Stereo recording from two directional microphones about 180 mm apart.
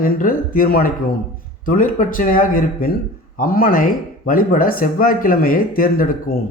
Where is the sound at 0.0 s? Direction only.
50° left (ahead or behind).